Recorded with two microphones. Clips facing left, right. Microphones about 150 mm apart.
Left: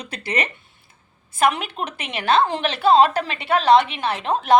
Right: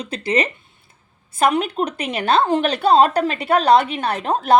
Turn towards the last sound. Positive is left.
turn(degrees=-40)  # may be behind; listen again after turning